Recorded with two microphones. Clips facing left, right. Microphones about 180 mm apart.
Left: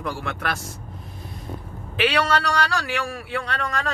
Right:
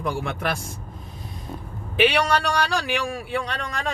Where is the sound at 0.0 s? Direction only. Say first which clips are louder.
Right 2 dB; 15° right (ahead or behind).